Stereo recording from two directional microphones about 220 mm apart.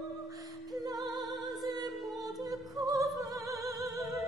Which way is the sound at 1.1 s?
20° right (ahead or behind).